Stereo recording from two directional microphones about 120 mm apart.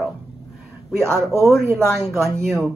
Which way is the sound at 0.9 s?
20° right (ahead or behind).